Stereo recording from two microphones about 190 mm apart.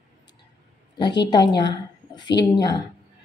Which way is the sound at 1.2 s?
20° left (ahead or behind).